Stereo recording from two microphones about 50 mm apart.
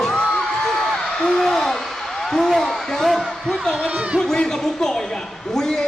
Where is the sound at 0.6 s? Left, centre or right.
Centre.